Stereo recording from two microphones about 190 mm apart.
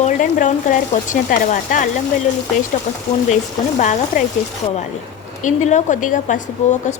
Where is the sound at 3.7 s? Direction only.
40° left (ahead or behind).